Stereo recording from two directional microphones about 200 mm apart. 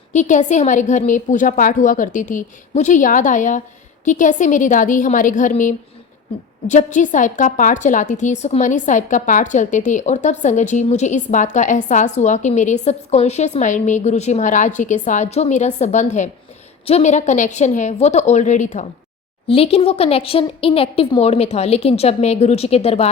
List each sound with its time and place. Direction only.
0.1 s a woman's voice: 35° left (ahead or behind)